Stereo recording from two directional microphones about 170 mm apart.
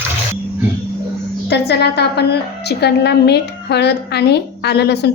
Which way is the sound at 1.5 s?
75° left (ahead or behind).